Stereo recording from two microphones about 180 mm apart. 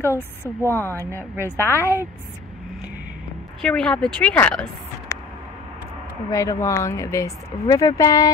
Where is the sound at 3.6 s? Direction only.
5° left (ahead or behind).